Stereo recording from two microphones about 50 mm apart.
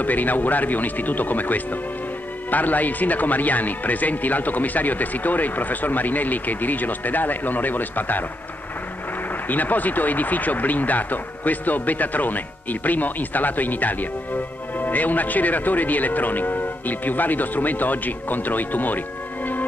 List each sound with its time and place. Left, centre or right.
0.0 s speech: left
9.5 s speech: left